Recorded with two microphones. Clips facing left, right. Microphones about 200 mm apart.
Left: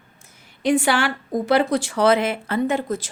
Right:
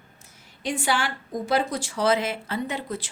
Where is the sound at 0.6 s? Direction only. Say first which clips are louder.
Left 7 dB; 65° left (ahead or behind).